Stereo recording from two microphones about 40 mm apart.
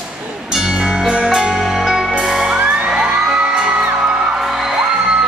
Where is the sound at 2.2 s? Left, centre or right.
Centre.